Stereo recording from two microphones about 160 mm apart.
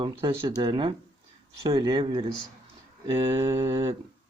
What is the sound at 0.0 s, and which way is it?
Speech, 25° right (ahead or behind).